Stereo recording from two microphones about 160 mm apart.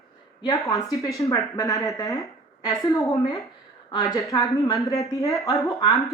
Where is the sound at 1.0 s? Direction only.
20° left (ahead or behind).